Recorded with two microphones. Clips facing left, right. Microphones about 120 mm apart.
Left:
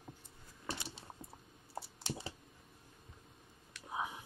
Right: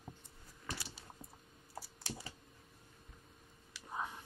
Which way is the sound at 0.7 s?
25° left (ahead or behind).